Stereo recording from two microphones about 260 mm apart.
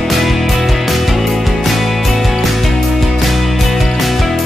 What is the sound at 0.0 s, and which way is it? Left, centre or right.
Music, centre.